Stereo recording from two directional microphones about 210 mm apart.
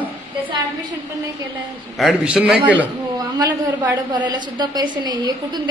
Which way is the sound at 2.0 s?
5° right (ahead or behind).